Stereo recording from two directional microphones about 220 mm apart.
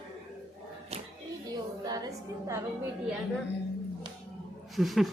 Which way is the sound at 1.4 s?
15° right (ahead or behind).